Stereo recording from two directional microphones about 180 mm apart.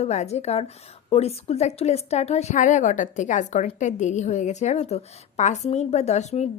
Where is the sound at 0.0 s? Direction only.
40° left (ahead or behind).